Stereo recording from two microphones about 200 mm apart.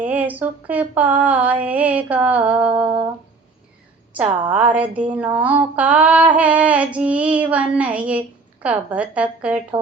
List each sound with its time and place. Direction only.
0.0 s female singing: 10° right (ahead or behind)
4.1 s female singing: 10° right (ahead or behind)